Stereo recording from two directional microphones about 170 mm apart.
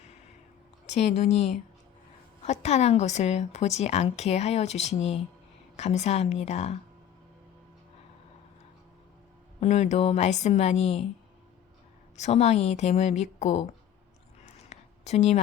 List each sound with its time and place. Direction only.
0.9 s speech: 40° left (ahead or behind)
9.6 s speech: 40° left (ahead or behind)
12.1 s speech: 40° left (ahead or behind)
14.4 s a sound: 40° left (ahead or behind)